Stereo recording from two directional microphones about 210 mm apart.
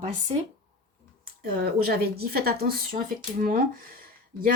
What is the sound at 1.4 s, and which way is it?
A woman's voice, 45° right (ahead or behind).